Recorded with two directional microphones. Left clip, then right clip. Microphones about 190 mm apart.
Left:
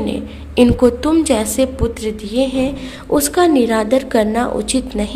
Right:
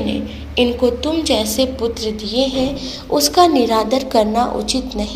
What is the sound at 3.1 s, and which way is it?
A woman's voice, 30° left (ahead or behind).